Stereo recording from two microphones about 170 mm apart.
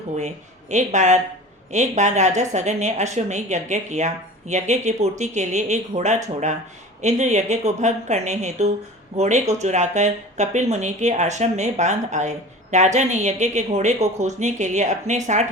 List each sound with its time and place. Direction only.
0.2 s speech: 45° right (ahead or behind)